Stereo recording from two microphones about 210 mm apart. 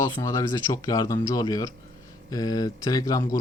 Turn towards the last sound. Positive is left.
turn(degrees=15)  # may be behind; listen again after turning